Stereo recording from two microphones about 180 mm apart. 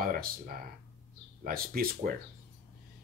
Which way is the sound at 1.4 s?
55° right (ahead or behind).